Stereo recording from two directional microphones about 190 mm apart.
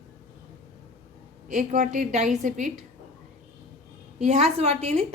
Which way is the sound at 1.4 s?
40° right (ahead or behind).